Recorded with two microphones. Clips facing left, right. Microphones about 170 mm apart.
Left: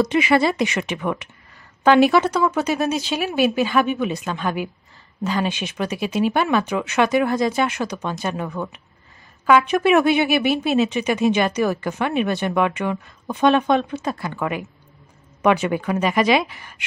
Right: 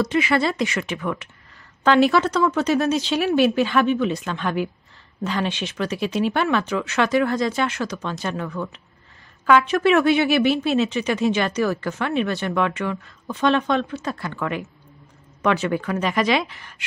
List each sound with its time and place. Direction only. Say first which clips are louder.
0.0 s speech: left 3 dB; 15° left (ahead or behind)